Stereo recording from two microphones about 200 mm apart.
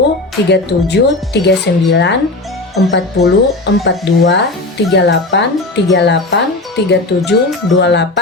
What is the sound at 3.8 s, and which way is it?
Speech, 60° left (ahead or behind).